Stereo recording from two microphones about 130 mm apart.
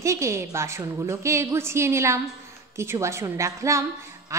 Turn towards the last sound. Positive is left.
turn(degrees=-25)  # may be behind; listen again after turning